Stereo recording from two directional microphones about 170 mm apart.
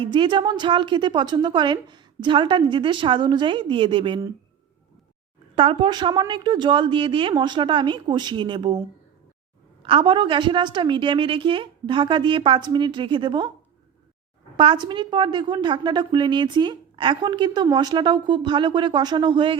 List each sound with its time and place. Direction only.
0.0 s a woman's voice: 30° right (ahead or behind)
5.5 s a woman's voice: 30° right (ahead or behind)
9.8 s a woman's voice: 30° right (ahead or behind)
14.5 s a woman's voice: 30° right (ahead or behind)